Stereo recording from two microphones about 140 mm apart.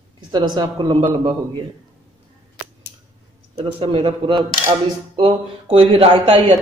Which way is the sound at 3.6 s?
40° right (ahead or behind).